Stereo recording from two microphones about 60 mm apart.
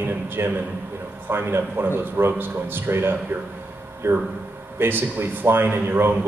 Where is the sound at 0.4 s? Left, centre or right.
Right.